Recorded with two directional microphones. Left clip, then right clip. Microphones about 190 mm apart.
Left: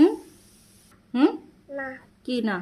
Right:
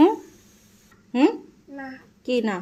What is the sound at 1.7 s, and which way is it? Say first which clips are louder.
Speech: left 4 dB; 15° left (ahead or behind).